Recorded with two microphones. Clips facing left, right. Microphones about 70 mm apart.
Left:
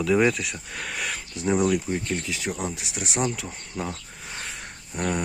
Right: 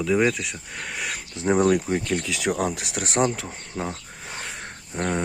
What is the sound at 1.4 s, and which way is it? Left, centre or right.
Speech, right.